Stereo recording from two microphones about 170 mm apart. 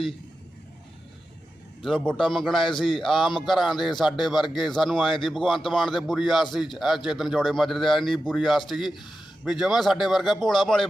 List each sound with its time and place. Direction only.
1.8 s a man's voice: centre (ahead or behind)